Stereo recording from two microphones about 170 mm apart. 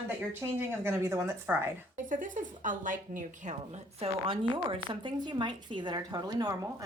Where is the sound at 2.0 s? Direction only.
50° right (ahead or behind); by 6.8 s 20° right (ahead or behind).